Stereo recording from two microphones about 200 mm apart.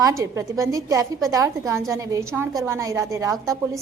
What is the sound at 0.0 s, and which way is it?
A woman's voice, 15° right (ahead or behind).